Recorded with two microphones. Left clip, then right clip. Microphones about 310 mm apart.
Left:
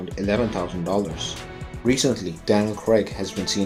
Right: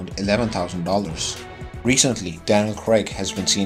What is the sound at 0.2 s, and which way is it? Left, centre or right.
Speech, right.